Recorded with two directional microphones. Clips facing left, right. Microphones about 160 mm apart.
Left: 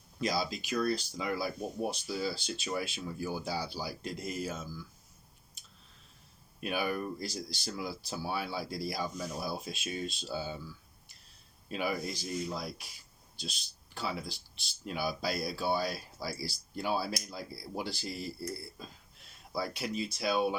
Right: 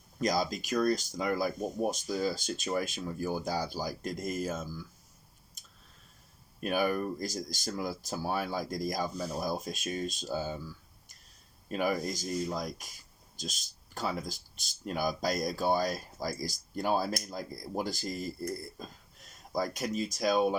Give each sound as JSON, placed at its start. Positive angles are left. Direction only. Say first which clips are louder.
{"t": 0.2, "sound": "speech", "louder": "right 3 dB", "side_deg": -45}
{"t": 5.6, "sound": "a sound", "louder": "right 2 dB", "side_deg": -45}
{"t": 6.6, "sound": "speech", "louder": "right 4 dB", "side_deg": -45}
{"t": 11.7, "sound": "speech", "louder": "right 4 dB", "side_deg": -45}